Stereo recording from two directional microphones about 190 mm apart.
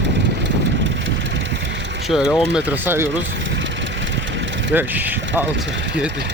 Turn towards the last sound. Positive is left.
turn(degrees=-10)  # may be behind; listen again after turning